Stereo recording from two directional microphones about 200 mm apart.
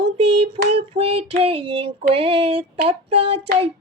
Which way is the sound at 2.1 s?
30° right (ahead or behind).